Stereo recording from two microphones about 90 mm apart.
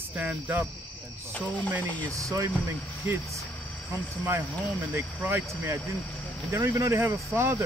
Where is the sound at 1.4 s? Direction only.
15° left (ahead or behind).